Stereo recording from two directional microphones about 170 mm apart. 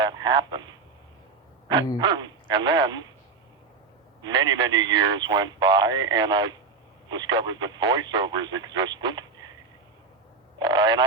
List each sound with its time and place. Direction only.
0.0 s a man's voice: 25° right (ahead or behind)
2.0 s a man's voice: 25° right (ahead or behind)
4.2 s a man's voice: 25° right (ahead or behind)
10.6 s a man's voice: 25° right (ahead or behind)